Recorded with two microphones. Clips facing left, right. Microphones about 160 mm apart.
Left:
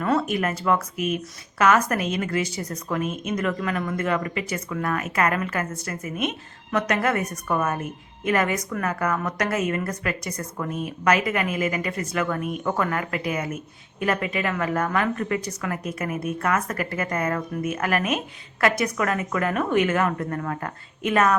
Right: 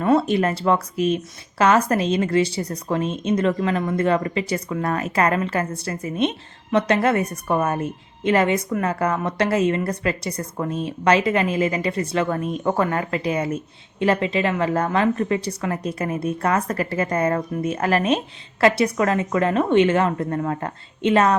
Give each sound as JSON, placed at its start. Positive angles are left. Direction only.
{"t": 0.0, "sound": "speech", "side_deg": -30}